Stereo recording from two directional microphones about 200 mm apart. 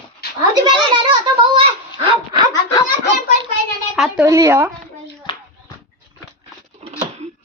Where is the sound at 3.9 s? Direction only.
Centre (ahead or behind).